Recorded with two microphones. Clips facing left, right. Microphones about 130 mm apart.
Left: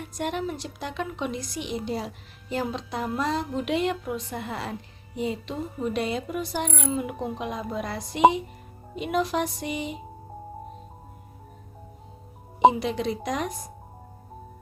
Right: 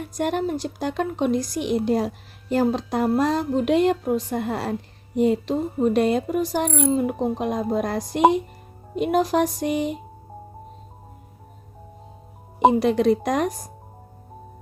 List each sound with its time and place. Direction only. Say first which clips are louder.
0.0 s speech: right 6 dB; 45° right (ahead or behind)
12.7 s speech: right 9 dB; 50° right (ahead or behind)